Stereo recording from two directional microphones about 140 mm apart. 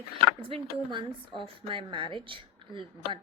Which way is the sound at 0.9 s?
35° right (ahead or behind).